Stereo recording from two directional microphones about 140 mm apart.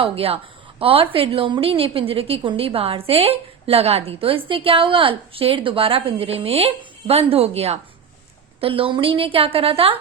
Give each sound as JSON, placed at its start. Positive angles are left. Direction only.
{"t": 0.0, "sound": "a woman's voice", "side_deg": -45}